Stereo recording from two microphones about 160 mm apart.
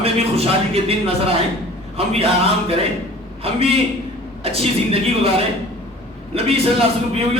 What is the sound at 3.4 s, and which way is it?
A man's voice, 35° right (ahead or behind).